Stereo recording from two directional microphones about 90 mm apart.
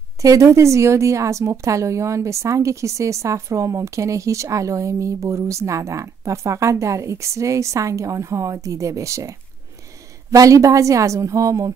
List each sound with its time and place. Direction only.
0.2 s a woman's voice: 40° right (ahead or behind)
10.3 s a woman's voice: 40° right (ahead or behind)